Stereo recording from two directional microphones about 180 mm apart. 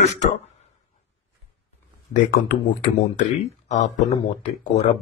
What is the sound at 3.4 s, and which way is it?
Speech, 40° left (ahead or behind).